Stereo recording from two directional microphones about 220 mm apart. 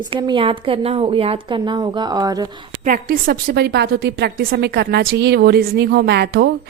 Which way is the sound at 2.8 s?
40° right (ahead or behind).